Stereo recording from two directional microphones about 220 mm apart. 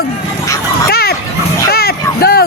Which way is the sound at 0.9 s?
45° left (ahead or behind).